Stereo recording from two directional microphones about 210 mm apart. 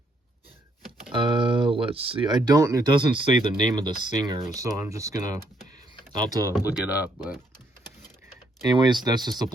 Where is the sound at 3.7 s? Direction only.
20° right (ahead or behind).